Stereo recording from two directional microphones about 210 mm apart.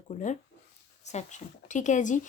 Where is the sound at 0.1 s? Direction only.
40° left (ahead or behind).